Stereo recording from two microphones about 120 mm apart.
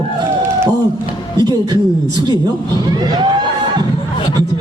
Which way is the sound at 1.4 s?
35° right (ahead or behind).